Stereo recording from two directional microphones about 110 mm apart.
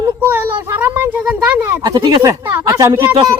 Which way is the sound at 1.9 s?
35° right (ahead or behind).